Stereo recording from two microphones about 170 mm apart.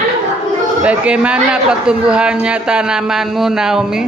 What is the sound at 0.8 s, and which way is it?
Music, 5° right (ahead or behind).